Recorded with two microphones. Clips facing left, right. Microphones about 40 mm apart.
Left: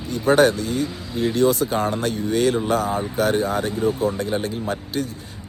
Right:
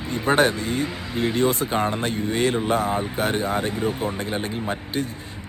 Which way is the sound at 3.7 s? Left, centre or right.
Right.